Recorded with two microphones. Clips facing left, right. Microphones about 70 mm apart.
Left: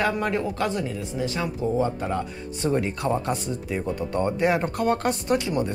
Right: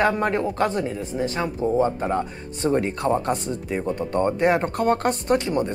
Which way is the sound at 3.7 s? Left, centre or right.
Right.